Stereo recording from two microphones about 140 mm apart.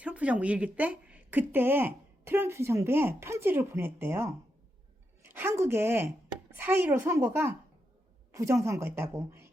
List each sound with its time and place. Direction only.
0.0 s a woman's voice: 10° right (ahead or behind)